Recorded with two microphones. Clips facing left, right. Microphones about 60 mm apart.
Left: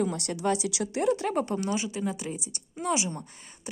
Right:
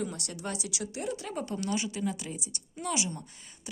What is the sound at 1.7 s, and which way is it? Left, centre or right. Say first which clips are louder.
A woman's voice: left 2 dB; centre.